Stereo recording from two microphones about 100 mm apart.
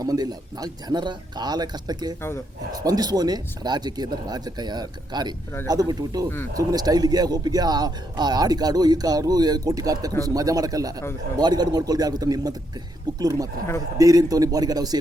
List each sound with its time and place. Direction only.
0.0 s speech: 40° right (ahead or behind)